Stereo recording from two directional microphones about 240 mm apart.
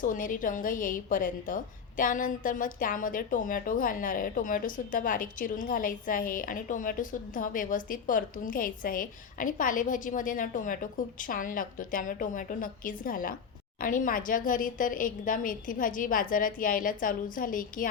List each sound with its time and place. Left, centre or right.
0.0 s a woman's voice: left